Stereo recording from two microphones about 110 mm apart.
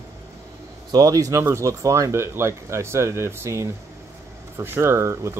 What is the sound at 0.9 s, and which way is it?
Speech, 35° right (ahead or behind).